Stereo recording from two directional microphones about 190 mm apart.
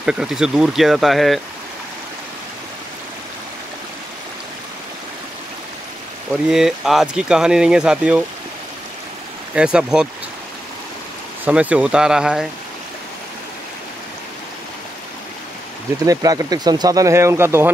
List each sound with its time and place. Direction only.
0.0 s speech: 5° right (ahead or behind)
6.5 s speech: centre (ahead or behind)
9.6 s speech: 5° right (ahead or behind)
11.4 s speech: 5° right (ahead or behind)
16.1 s speech: 20° right (ahead or behind)